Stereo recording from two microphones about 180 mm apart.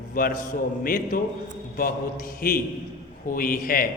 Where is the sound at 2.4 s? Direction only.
55° left (ahead or behind).